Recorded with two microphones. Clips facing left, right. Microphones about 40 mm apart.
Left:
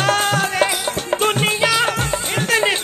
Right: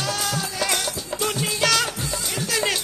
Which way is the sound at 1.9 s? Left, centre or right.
Left.